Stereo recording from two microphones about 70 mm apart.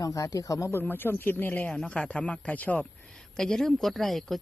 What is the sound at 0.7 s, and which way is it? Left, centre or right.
Speech, left.